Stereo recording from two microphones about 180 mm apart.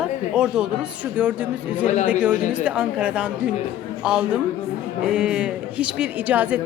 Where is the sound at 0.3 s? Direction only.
5° right (ahead or behind).